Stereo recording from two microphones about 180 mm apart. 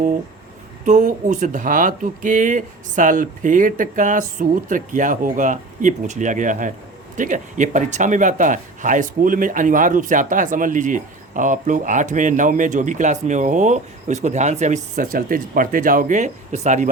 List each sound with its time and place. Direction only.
0.9 s speech: 45° right (ahead or behind)
15.0 s speech: 55° right (ahead or behind)